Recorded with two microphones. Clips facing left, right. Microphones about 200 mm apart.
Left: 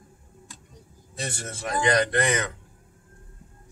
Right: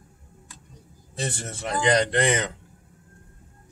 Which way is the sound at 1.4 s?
25° right (ahead or behind).